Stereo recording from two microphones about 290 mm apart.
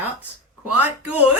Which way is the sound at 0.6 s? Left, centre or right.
Centre.